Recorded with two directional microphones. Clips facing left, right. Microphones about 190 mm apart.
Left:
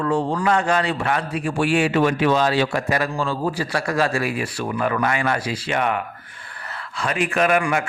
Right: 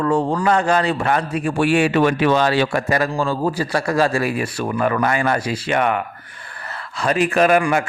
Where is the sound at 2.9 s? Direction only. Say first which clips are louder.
Right 3 dB; 45° right (ahead or behind).